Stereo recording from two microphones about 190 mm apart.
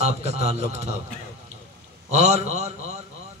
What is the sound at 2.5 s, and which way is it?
Speech, 35° right (ahead or behind).